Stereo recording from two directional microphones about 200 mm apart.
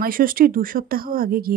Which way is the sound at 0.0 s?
45° right (ahead or behind).